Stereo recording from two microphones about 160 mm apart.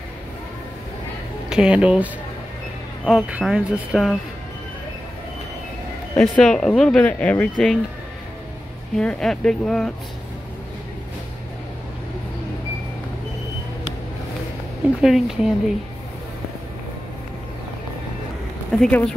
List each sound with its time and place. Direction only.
1.5 s speech: 5° right (ahead or behind)
3.1 s speech: 5° right (ahead or behind)
6.1 s speech: centre (ahead or behind)
8.9 s speech: 5° left (ahead or behind)
15.0 s speech: centre (ahead or behind)
18.7 s speech: 5° left (ahead or behind)